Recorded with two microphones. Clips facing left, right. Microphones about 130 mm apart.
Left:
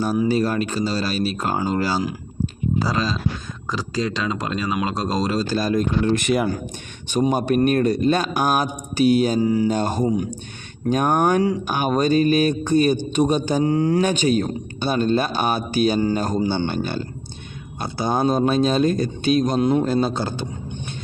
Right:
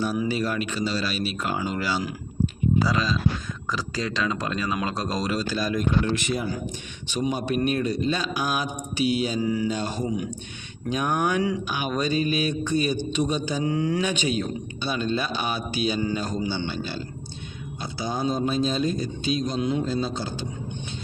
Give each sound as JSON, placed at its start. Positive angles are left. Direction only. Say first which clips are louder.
{"t": 0.0, "sound": "speech", "louder": "left 6 dB", "side_deg": 40}
{"t": 3.7, "sound": "speech", "louder": "left 5 dB", "side_deg": 20}
{"t": 6.1, "sound": "speech", "louder": "left 7 dB", "side_deg": 65}
{"t": 7.1, "sound": "speech", "louder": "left 6 dB", "side_deg": 50}